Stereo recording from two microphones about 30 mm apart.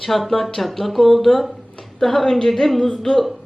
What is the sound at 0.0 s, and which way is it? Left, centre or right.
A woman's voice, centre.